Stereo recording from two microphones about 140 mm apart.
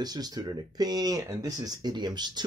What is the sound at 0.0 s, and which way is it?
Speech, 30° right (ahead or behind).